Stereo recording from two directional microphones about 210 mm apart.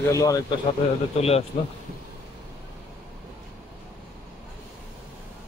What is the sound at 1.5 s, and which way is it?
Speech, 35° left (ahead or behind).